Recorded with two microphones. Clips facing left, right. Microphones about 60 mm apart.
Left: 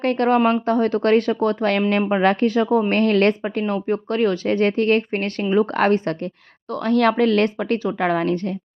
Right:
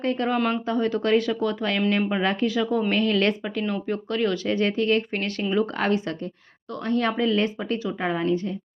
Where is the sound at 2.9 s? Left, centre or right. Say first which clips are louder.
Left 5 dB; left.